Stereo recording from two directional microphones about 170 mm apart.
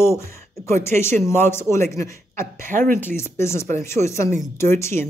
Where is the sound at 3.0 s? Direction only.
15° left (ahead or behind).